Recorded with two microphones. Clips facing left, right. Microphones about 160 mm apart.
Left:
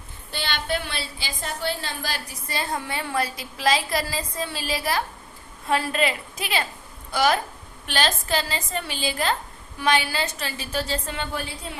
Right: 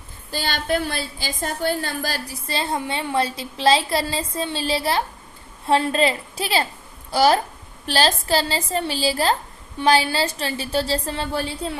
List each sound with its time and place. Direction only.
0.3 s a woman's voice: 40° right (ahead or behind)